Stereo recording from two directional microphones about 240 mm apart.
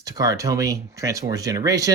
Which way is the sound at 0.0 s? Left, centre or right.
Centre.